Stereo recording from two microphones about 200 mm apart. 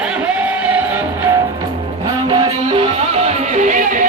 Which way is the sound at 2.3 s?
25° right (ahead or behind).